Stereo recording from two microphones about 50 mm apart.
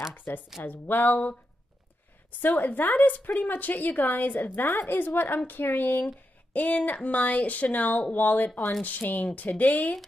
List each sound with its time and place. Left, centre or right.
0.1 s a woman's voice: left
2.4 s a woman's voice: left
6.5 s a woman's voice: left